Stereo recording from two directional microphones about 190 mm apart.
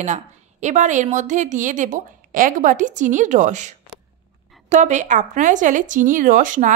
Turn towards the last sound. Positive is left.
turn(degrees=-45)  # may be behind; listen again after turning